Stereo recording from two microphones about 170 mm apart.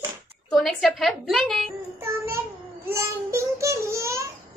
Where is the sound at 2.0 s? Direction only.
15° right (ahead or behind).